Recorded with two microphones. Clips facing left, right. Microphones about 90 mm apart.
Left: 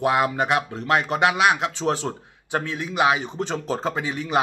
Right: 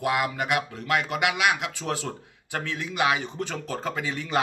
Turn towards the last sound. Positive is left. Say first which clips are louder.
# left 4 dB
turn(degrees=20)  # may be behind; listen again after turning